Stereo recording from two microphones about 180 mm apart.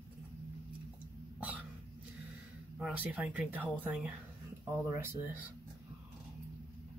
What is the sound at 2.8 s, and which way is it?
Speech, 5° right (ahead or behind).